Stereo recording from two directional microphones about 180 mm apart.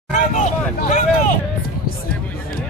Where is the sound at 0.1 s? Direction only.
40° left (ahead or behind).